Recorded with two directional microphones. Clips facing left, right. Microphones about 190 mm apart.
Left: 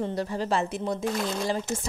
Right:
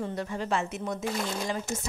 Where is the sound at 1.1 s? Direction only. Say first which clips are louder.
Left 2 dB; centre (ahead or behind).